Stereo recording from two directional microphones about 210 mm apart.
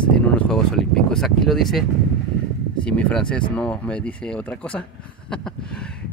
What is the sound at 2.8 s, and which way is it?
Speech, 5° left (ahead or behind).